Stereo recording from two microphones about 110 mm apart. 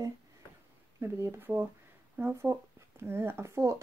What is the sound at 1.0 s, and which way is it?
Speech, 20° right (ahead or behind).